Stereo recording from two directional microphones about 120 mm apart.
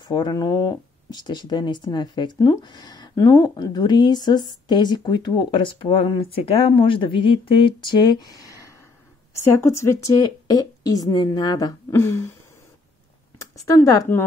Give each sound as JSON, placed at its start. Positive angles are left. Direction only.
{"t": 0.1, "sound": "a woman's voice", "side_deg": 35}
{"t": 9.4, "sound": "a woman's voice", "side_deg": 20}
{"t": 10.2, "sound": "a woman's voice", "side_deg": 35}
{"t": 13.4, "sound": "speech", "side_deg": 25}